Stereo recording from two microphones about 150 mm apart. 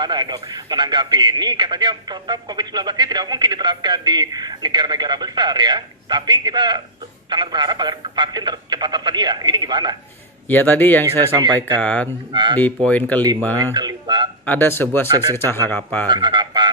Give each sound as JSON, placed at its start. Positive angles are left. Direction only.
{"t": 0.0, "sound": "a man's voice", "side_deg": -30}
{"t": 10.5, "sound": "speech", "side_deg": 15}
{"t": 11.3, "sound": "a man's voice", "side_deg": -25}
{"t": 11.8, "sound": "speech", "side_deg": 10}
{"t": 12.3, "sound": "speech", "side_deg": -30}
{"t": 12.5, "sound": "speech", "side_deg": 10}
{"t": 13.7, "sound": "a sound", "side_deg": -30}
{"t": 14.4, "sound": "speech", "side_deg": 15}
{"t": 15.1, "sound": "a man's voice", "side_deg": -25}
{"t": 15.7, "sound": "speech", "side_deg": 15}
{"t": 16.0, "sound": "a man's voice", "side_deg": -30}